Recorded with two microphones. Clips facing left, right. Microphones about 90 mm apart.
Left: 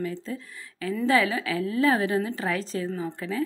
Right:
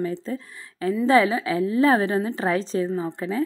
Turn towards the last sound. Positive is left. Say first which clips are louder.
# right 4 dB
turn(degrees=-25)  # may be behind; listen again after turning